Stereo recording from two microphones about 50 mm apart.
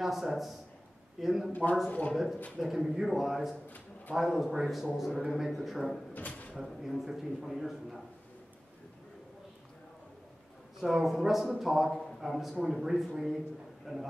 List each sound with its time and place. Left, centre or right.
0.0 s a man's voice: centre
1.5 s speech: left
2.6 s a man's voice: centre
6.1 s drawer open or close: left
6.5 s a man's voice: centre
10.8 s a man's voice: centre